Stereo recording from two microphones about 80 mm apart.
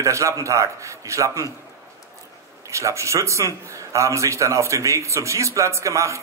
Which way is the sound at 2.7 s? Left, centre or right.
Right.